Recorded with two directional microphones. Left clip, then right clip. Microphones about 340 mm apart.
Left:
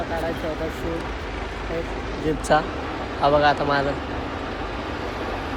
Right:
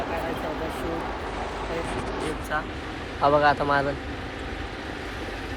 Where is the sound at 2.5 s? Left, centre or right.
Centre.